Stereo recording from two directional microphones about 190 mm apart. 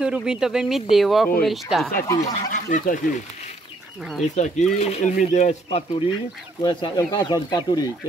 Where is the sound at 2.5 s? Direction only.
45° left (ahead or behind).